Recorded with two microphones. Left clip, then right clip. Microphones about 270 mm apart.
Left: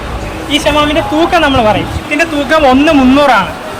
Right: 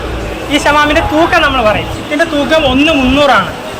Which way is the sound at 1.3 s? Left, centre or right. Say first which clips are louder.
Left 1 dB; centre.